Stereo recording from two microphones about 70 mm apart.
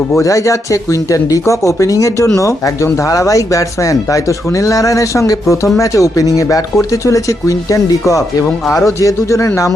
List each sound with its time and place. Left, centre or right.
0.2 s speech: left